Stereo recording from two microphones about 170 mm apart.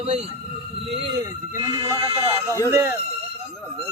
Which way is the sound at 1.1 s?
20° right (ahead or behind).